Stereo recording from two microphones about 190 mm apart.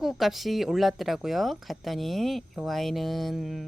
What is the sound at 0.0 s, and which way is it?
Speech, centre (ahead or behind).